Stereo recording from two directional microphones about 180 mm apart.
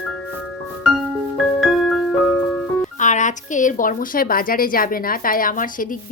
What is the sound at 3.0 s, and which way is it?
Speech, 45° left (ahead or behind).